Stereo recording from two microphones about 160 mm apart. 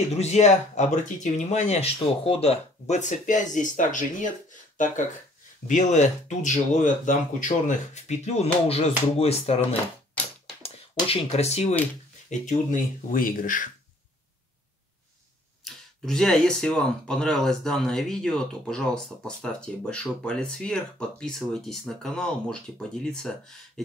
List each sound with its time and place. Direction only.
0.1 s speech: 45° left (ahead or behind)
10.6 s speech: 40° left (ahead or behind)
12.3 s speech: 55° left (ahead or behind)
15.6 s speech: 5° left (ahead or behind)